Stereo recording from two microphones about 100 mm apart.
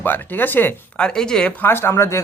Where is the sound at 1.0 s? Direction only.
5° left (ahead or behind).